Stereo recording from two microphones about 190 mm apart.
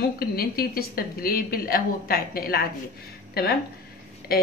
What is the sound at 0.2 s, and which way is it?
A woman's voice, 50° left (ahead or behind).